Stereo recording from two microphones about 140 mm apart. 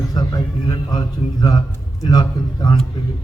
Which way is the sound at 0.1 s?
25° left (ahead or behind).